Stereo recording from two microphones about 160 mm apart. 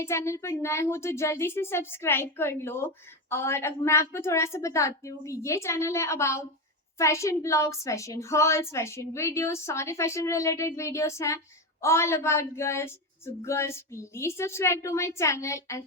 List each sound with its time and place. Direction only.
0.0 s a woman's voice: 15° left (ahead or behind)